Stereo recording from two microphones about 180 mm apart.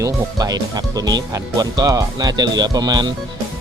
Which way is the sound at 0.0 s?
20° right (ahead or behind).